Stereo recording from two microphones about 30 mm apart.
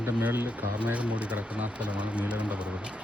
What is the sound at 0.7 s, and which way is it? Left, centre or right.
Speech, right.